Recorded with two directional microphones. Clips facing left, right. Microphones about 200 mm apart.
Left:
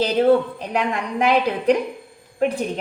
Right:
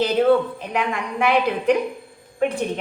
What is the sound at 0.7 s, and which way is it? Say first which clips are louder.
A woman's voice: left 3 dB; 35° left (ahead or behind).